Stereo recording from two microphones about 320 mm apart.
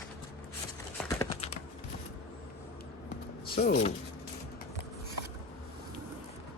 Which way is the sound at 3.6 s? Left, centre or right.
Left.